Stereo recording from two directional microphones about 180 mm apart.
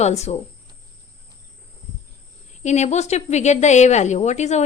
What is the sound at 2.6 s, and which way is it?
Speech, 40° left (ahead or behind).